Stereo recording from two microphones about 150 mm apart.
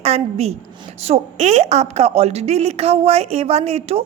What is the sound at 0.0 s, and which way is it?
A woman's voice, 45° right (ahead or behind).